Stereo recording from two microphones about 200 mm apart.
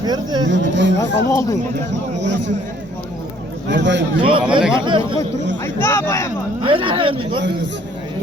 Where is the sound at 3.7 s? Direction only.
60° right (ahead or behind).